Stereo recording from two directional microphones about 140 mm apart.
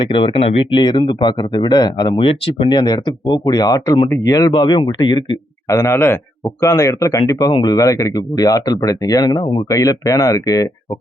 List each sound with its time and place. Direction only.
0.0 s speech: 35° left (ahead or behind)
5.6 s speech: 20° left (ahead or behind)